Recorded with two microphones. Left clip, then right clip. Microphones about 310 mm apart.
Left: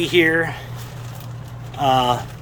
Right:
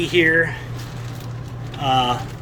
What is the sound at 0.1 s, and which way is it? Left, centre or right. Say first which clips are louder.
Speech: right 1 dB; centre.